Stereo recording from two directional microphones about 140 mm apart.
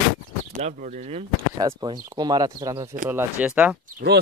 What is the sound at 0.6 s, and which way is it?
Speech, 50° right (ahead or behind).